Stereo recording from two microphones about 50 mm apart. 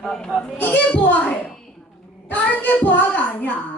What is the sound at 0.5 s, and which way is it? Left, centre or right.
Speech, left.